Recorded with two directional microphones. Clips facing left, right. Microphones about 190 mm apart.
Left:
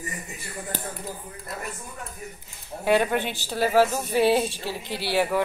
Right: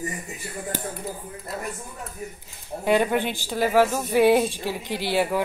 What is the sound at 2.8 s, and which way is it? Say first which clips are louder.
A woman's voice: right 1 dB; 15° right (ahead or behind).